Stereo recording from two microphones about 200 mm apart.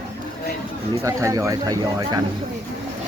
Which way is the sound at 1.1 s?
15° right (ahead or behind).